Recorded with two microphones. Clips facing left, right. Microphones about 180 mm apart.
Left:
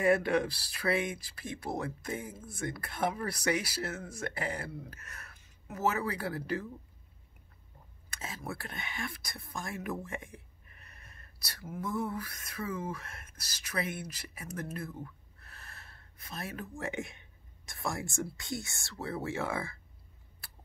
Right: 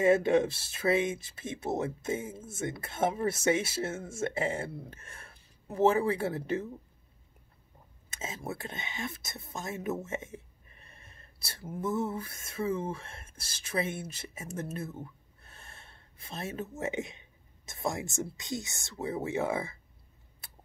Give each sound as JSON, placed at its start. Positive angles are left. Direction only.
{"t": 0.0, "sound": "speech", "side_deg": -25}
{"t": 8.1, "sound": "speech", "side_deg": -20}